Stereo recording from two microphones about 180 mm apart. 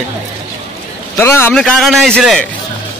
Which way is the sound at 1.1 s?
15° left (ahead or behind).